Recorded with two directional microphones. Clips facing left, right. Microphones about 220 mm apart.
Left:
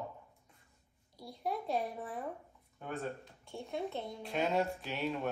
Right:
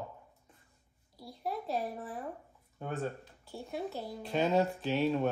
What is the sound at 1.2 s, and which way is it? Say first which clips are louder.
Speech: even; centre (ahead or behind).